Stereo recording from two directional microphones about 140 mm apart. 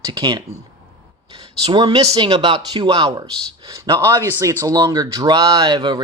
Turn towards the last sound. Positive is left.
turn(degrees=-30)  # may be behind; listen again after turning